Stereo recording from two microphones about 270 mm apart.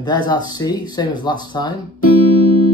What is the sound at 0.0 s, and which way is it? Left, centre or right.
Speech, centre.